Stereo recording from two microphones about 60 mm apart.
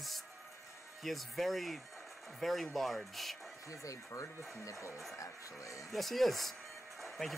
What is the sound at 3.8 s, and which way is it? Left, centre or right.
Speech, left.